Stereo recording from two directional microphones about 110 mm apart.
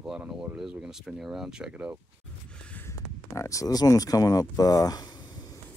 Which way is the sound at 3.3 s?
30° left (ahead or behind).